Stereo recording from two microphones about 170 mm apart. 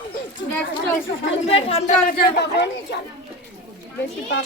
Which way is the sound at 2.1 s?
75° left (ahead or behind).